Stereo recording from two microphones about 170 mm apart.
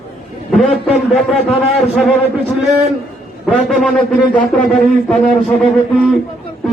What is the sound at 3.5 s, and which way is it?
A man's voice, centre (ahead or behind).